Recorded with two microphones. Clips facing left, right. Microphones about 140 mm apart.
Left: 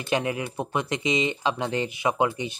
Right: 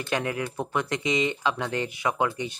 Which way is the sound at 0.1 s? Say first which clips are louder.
Left 3 dB; 20° left (ahead or behind).